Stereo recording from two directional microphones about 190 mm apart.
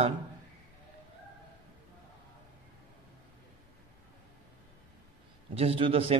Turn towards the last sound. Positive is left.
turn(degrees=-30)  # may be behind; listen again after turning